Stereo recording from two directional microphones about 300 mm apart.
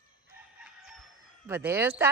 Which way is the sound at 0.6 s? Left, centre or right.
Centre.